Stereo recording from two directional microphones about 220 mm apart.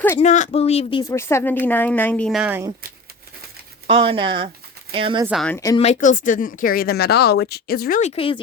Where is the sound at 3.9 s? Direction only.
25° right (ahead or behind).